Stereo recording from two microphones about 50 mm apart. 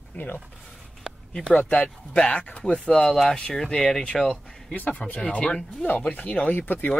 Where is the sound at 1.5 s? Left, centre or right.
Left.